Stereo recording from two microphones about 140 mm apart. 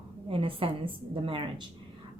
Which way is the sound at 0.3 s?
40° right (ahead or behind).